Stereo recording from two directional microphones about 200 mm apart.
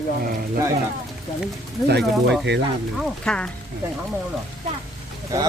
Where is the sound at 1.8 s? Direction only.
55° right (ahead or behind).